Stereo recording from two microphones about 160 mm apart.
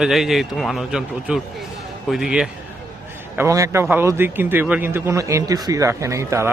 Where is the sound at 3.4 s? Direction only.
20° right (ahead or behind).